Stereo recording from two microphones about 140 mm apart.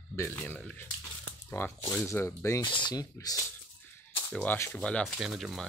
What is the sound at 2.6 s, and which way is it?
Speech, 35° left (ahead or behind).